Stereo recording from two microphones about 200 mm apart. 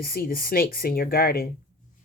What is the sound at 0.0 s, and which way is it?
Speech, 50° left (ahead or behind).